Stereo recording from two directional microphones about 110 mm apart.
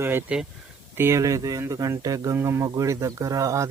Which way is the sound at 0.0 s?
20° right (ahead or behind).